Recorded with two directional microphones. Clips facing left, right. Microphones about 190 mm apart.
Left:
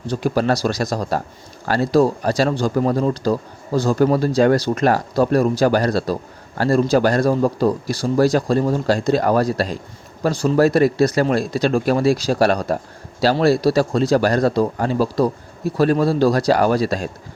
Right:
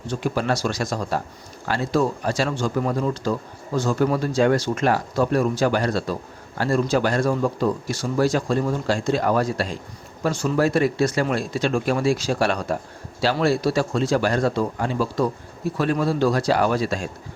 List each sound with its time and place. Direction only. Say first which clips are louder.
0.1 s speech: left 5 dB; 40° left (ahead or behind)